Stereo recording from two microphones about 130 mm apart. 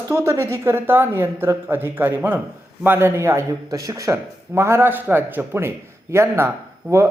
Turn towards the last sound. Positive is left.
turn(degrees=-25)  # may be behind; listen again after turning